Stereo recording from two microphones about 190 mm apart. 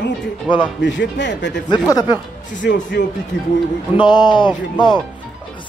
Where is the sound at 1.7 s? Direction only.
20° left (ahead or behind).